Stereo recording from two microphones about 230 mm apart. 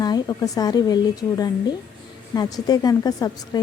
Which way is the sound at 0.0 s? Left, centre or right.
Centre.